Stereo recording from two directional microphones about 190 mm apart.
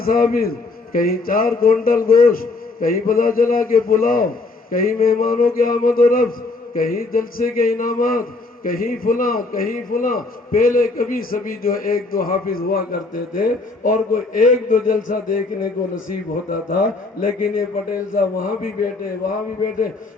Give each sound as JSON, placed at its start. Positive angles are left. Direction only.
{"t": 0.0, "sound": "a man's voice", "side_deg": 50}